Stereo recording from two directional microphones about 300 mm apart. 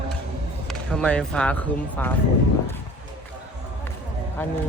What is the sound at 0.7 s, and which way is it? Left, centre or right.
Speech, centre.